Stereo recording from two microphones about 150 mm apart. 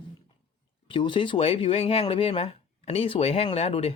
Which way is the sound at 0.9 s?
35° left (ahead or behind).